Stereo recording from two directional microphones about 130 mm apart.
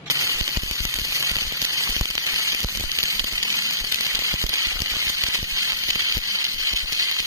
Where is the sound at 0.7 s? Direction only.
25° right (ahead or behind).